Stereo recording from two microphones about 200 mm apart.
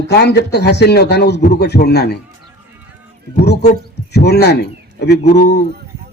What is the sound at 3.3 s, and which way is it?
Speech, 55° left (ahead or behind).